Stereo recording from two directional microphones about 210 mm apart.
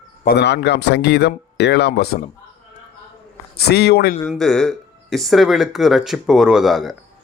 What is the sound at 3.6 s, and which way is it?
Speech, 50° left (ahead or behind).